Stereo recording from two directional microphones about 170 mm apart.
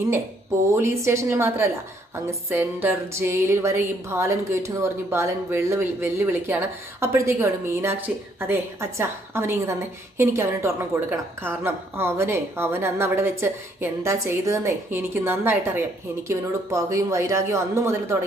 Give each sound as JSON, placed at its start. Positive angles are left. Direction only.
{"t": 0.7, "sound": "music", "side_deg": -15}